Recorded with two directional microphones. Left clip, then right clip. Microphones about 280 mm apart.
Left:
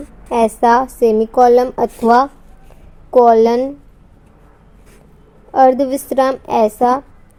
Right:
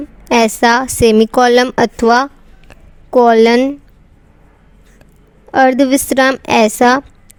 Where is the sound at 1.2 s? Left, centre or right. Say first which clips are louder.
Left 2 dB; right.